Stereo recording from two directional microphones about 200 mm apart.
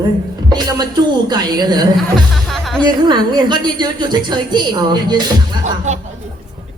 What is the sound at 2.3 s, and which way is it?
Music, centre (ahead or behind).